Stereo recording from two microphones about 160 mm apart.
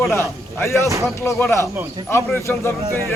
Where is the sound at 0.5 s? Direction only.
20° left (ahead or behind).